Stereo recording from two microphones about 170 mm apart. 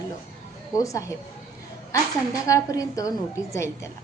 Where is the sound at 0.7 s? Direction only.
20° left (ahead or behind).